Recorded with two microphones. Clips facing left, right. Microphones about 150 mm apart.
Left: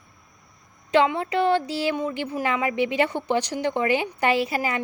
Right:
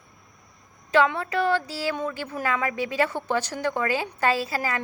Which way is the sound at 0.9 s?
20° left (ahead or behind).